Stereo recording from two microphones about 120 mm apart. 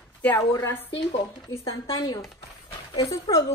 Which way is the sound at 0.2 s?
15° left (ahead or behind).